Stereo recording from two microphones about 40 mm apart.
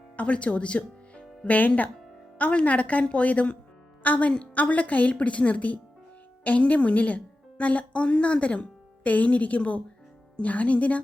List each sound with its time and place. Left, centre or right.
0.2 s a woman's voice: left
4.0 s a woman's voice: left